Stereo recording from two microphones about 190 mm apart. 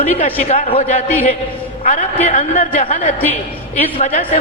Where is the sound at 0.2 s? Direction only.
30° left (ahead or behind).